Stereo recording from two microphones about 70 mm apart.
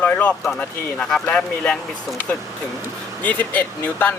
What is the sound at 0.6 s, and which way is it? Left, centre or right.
Speech, centre.